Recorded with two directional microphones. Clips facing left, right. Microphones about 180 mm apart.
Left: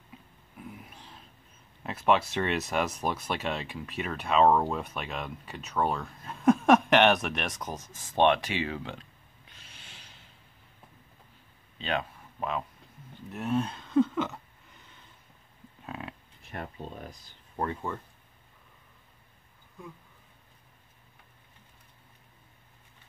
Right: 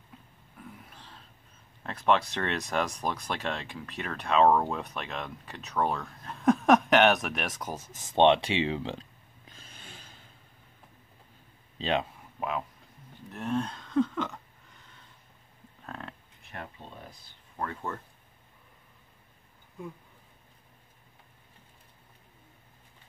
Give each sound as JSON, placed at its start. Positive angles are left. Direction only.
{"t": 0.6, "sound": "a sound", "side_deg": 10}
{"t": 1.8, "sound": "speech", "side_deg": 5}
{"t": 7.9, "sound": "speech", "side_deg": -25}
{"t": 11.8, "sound": "speech", "side_deg": -25}
{"t": 12.4, "sound": "speech", "side_deg": -5}
{"t": 15.8, "sound": "a sound", "side_deg": 10}